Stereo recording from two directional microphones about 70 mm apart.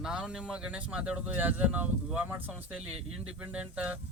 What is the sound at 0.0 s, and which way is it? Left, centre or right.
Speech, centre.